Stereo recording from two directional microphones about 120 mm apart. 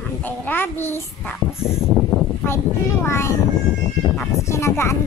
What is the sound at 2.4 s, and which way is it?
Speech, 20° left (ahead or behind).